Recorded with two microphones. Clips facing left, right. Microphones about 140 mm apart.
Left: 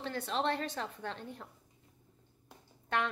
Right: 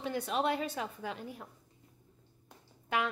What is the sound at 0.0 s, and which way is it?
A woman's voice, 10° right (ahead or behind).